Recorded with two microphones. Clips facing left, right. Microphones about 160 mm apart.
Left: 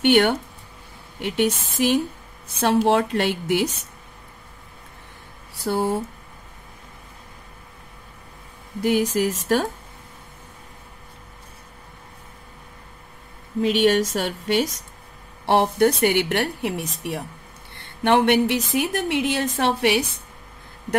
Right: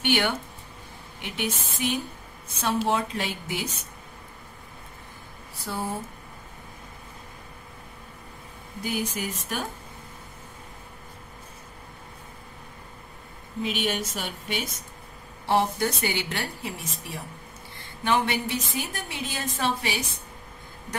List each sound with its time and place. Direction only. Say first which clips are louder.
0.0 s a woman's voice: left 8 dB; 65° left (ahead or behind)
1.2 s a woman's voice: left 9 dB; 75° left (ahead or behind)
5.6 s a woman's voice: left 9 dB; 75° left (ahead or behind)
8.8 s speech: left 10 dB; 75° left (ahead or behind)
13.8 s speech: left 10 dB; 80° left
15.4 s a woman's voice: left 6 dB; 65° left (ahead or behind)